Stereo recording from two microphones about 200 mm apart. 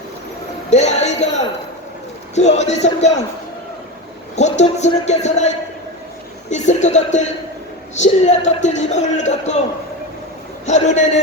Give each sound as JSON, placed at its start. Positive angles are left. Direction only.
{"t": 0.7, "sound": "speech", "side_deg": 35}
{"t": 2.3, "sound": "speech", "side_deg": 35}
{"t": 4.4, "sound": "speech", "side_deg": 35}
{"t": 10.7, "sound": "speech", "side_deg": 35}